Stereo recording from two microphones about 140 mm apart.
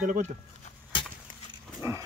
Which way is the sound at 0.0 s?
65° right (ahead or behind).